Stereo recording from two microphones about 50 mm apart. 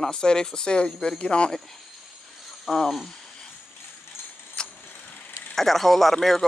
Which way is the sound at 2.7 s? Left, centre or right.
Centre.